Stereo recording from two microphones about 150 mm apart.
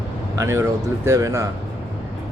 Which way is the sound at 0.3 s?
20° right (ahead or behind).